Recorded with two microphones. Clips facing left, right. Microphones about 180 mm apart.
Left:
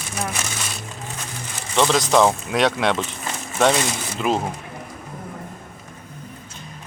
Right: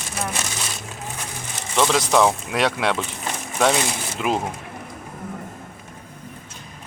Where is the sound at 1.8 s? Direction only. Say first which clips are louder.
Left 1 dB; centre (ahead or behind).